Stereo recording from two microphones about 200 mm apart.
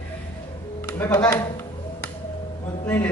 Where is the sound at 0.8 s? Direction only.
10° left (ahead or behind).